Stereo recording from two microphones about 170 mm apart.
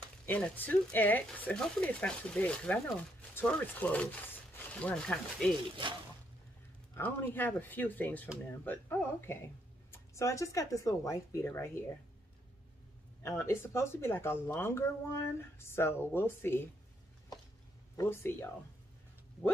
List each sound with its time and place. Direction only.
0.3 s speech: 10° left (ahead or behind)
7.0 s speech: 10° left (ahead or behind)
13.2 s speech: 15° left (ahead or behind)
17.9 s speech: 15° left (ahead or behind)